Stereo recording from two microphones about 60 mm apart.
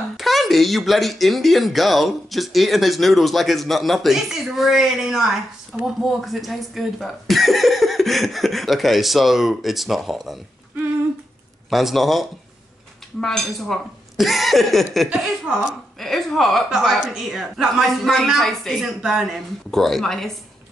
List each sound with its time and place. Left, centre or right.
0.2 s a woman's voice: centre
11.7 s speech: centre
16.6 s a woman's voice: centre
18.8 s speech: centre